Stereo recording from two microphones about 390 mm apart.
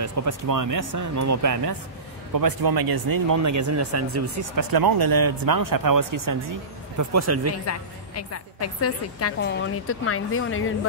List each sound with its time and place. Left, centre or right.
0.0 s speech: right
2.3 s speech: right
4.6 s speech: right
7.0 s speech: right
7.6 s a woman's voice: left